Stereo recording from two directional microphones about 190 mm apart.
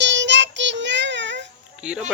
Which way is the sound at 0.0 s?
70° right (ahead or behind).